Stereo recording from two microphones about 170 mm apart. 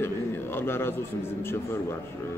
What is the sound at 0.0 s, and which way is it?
Bird, 15° left (ahead or behind).